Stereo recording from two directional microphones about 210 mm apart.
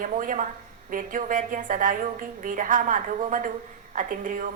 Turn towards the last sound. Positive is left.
turn(degrees=-40)  # may be behind; listen again after turning